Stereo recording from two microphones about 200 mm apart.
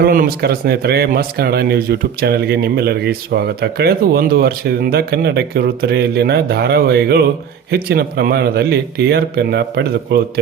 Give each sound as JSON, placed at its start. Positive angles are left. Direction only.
{"t": 0.0, "sound": "speech", "side_deg": -45}